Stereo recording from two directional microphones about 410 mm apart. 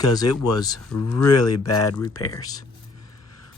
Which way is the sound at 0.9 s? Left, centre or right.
Left.